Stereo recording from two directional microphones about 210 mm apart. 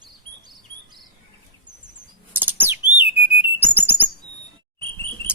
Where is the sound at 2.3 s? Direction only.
10° right (ahead or behind).